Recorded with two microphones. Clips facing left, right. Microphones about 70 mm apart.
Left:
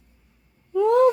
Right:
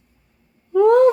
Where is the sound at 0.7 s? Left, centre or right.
Right.